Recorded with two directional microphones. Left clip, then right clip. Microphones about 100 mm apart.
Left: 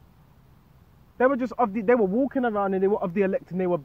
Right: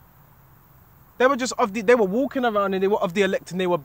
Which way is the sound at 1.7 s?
20° right (ahead or behind).